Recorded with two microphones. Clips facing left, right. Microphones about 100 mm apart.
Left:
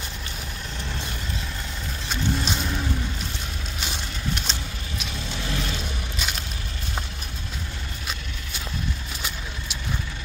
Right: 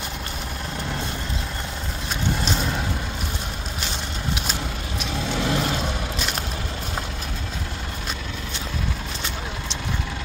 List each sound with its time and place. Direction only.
5.2 s vehicle: 70° right (ahead or behind)